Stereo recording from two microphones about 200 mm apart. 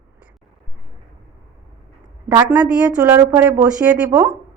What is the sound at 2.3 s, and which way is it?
Speech, 20° right (ahead or behind).